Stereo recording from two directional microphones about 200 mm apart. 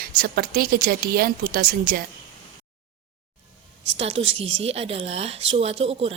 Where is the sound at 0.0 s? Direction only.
50° right (ahead or behind).